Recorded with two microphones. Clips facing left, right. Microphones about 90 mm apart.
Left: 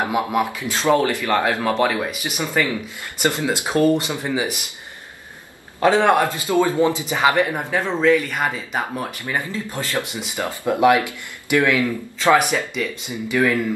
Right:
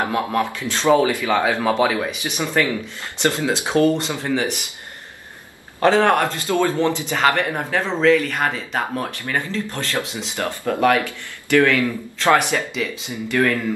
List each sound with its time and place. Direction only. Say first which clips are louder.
0.0 s speech: even; 15° left (ahead or behind)
5.8 s speech: even; 5° left (ahead or behind)